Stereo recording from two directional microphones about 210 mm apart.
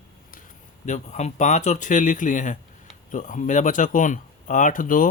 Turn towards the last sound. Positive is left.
turn(degrees=40)  # may be behind; listen again after turning